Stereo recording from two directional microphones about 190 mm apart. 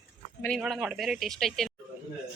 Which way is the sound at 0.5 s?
5° right (ahead or behind).